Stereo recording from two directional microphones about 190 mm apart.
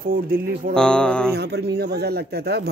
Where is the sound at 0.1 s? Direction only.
50° right (ahead or behind).